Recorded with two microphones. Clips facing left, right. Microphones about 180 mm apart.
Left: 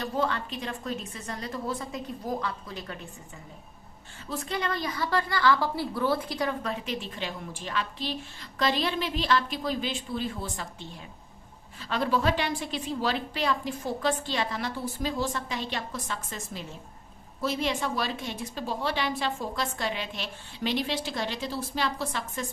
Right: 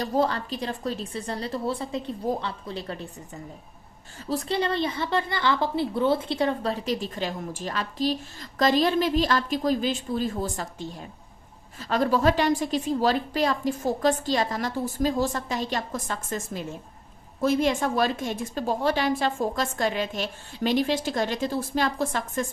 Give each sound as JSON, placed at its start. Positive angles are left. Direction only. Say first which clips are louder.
{"t": 0.0, "sound": "a woman's voice", "louder": "right 4 dB", "side_deg": -40}
{"t": 4.3, "sound": "a woman's voice", "louder": "right 5 dB", "side_deg": -35}